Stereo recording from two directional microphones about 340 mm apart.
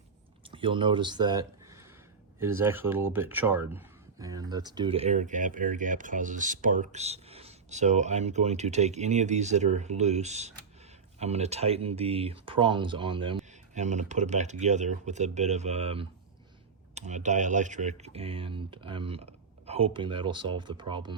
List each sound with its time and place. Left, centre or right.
0.4 s speech: centre